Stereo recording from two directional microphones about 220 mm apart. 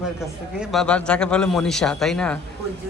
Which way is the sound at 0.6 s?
Centre (ahead or behind).